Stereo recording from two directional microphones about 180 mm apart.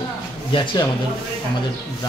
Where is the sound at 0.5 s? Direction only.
25° left (ahead or behind).